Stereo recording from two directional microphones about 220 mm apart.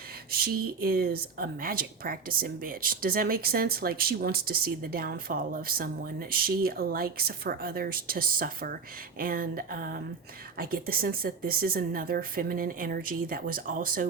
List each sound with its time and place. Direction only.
0.3 s speech: 45° right (ahead or behind)